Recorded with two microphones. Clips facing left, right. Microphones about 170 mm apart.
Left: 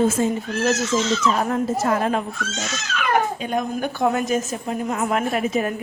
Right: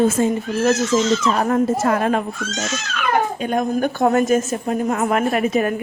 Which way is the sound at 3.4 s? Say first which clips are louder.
Right 4 dB; 50° right (ahead or behind).